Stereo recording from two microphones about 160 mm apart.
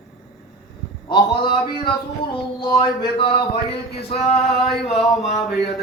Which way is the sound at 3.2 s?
35° left (ahead or behind).